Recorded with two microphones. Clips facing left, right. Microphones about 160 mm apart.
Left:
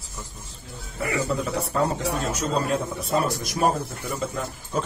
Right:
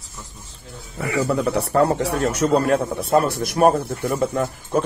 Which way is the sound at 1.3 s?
65° right (ahead or behind).